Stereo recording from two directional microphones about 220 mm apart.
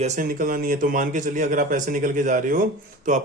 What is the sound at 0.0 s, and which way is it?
Speech, 35° right (ahead or behind).